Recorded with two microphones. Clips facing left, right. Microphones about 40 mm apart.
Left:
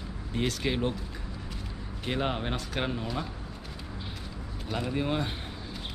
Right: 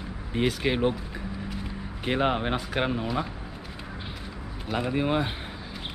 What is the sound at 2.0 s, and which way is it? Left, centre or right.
Speech, centre.